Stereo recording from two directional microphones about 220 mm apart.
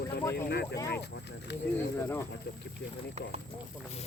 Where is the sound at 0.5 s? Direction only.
45° left (ahead or behind).